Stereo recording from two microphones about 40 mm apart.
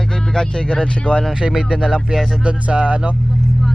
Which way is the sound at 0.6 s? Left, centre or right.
Left.